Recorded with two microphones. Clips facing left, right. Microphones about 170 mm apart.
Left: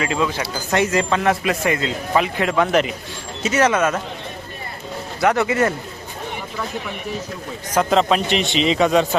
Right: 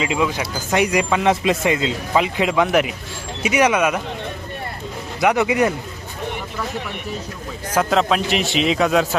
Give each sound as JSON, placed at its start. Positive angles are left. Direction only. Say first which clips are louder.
{"t": 0.0, "sound": "speech", "louder": "right 1 dB", "side_deg": -15}
{"t": 5.2, "sound": "speech", "louder": "right 1 dB", "side_deg": -15}
{"t": 7.7, "sound": "a man's voice", "louder": "left 1 dB", "side_deg": 0}